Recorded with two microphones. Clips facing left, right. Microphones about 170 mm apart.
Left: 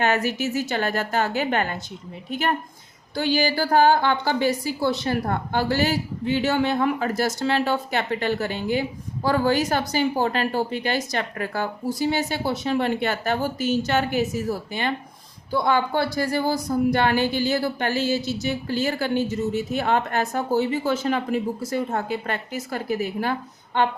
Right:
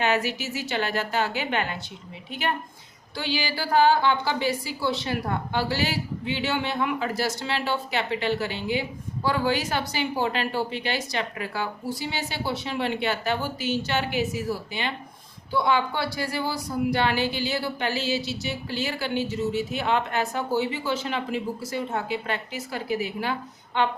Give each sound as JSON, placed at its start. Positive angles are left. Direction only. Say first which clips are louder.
{"t": 0.0, "sound": "a woman's voice", "louder": "left 3 dB", "side_deg": 50}